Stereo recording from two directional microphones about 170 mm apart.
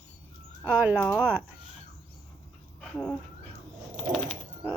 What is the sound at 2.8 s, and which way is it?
Dog, centre (ahead or behind).